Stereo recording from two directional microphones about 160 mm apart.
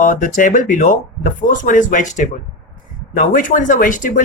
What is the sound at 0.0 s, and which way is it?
Speech, 55° left (ahead or behind).